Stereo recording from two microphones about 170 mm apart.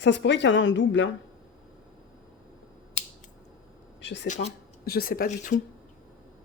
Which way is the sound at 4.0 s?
90° left.